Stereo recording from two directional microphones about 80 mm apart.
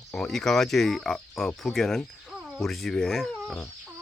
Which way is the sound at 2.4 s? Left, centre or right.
Centre.